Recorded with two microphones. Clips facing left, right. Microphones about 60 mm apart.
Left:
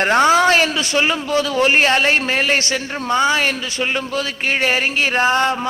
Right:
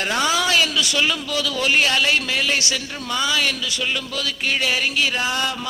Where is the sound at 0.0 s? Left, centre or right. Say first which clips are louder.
Left 8 dB; left.